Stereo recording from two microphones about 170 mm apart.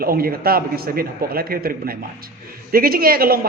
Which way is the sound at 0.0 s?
60° right (ahead or behind).